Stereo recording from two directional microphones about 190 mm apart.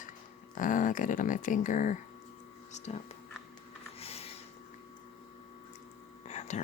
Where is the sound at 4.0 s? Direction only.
30° left (ahead or behind).